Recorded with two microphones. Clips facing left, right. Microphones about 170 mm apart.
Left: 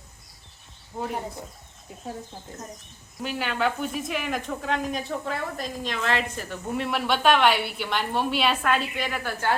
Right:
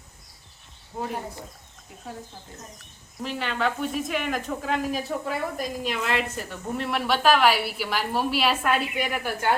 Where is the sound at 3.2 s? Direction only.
5° left (ahead or behind).